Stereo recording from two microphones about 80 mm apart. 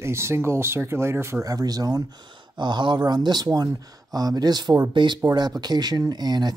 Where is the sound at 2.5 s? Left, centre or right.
Right.